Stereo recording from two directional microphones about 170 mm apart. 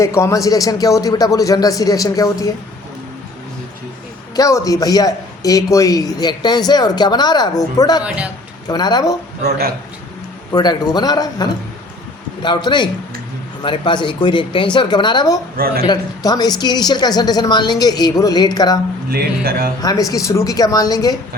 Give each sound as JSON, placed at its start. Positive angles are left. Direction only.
{"t": 0.0, "sound": "speech", "side_deg": 15}
{"t": 4.4, "sound": "speech", "side_deg": 20}
{"t": 8.0, "sound": "a man's voice", "side_deg": -5}
{"t": 8.6, "sound": "speech", "side_deg": 25}
{"t": 9.4, "sound": "a man's voice", "side_deg": -70}
{"t": 10.5, "sound": "speech", "side_deg": 25}
{"t": 15.5, "sound": "speech", "side_deg": -65}
{"t": 15.9, "sound": "speech", "side_deg": 25}
{"t": 19.1, "sound": "speech", "side_deg": -65}
{"t": 19.8, "sound": "speech", "side_deg": 20}